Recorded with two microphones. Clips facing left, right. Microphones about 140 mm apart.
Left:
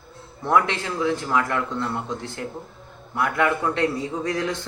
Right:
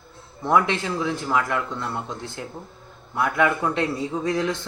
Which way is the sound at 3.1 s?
10° right (ahead or behind).